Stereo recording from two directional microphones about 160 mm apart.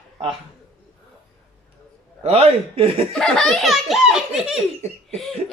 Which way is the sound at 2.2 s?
40° right (ahead or behind).